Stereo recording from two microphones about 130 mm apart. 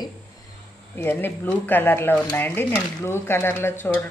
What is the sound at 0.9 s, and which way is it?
Speech, 15° left (ahead or behind).